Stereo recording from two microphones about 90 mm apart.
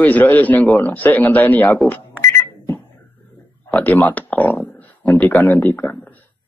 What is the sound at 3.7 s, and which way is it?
A man's voice, 15° left (ahead or behind).